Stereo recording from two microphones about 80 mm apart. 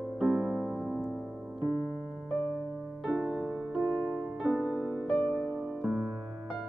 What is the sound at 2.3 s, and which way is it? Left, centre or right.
Electric piano, centre.